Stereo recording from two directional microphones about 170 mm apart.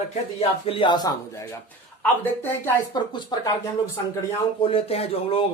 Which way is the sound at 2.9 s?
25° left (ahead or behind).